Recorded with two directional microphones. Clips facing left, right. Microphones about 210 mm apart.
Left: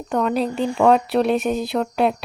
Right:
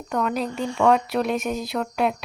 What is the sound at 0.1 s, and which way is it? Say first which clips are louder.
Speech: left 4 dB; 30° left (ahead or behind).